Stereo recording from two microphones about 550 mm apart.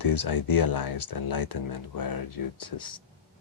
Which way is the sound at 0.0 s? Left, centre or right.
Left.